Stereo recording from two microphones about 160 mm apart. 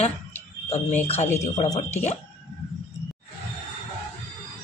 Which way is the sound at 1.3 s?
45° left (ahead or behind).